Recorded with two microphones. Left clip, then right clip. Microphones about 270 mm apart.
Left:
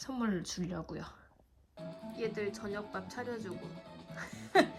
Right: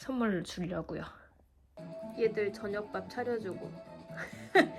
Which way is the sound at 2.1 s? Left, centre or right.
Centre.